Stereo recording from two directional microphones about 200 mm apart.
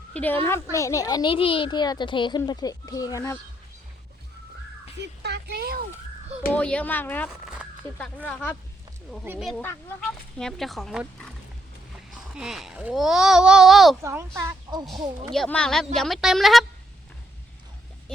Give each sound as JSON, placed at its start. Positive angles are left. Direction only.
{"t": 0.1, "sound": "a woman's voice", "side_deg": 10}
{"t": 5.2, "sound": "a sound", "side_deg": -55}
{"t": 6.5, "sound": "speech", "side_deg": 5}
{"t": 7.4, "sound": "a sound", "side_deg": -5}
{"t": 8.3, "sound": "speech", "side_deg": 10}
{"t": 9.2, "sound": "speech", "side_deg": -10}
{"t": 9.5, "sound": "speech", "side_deg": 10}
{"t": 12.3, "sound": "speech", "side_deg": -5}
{"t": 14.0, "sound": "speech", "side_deg": -15}
{"t": 15.3, "sound": "speech", "side_deg": 5}